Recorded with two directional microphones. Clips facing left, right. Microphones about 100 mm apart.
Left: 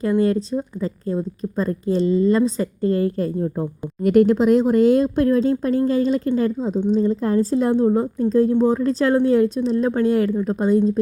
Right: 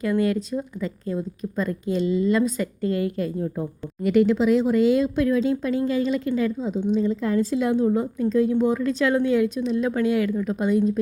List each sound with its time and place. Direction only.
0.0 s a woman's voice: 30° left (ahead or behind)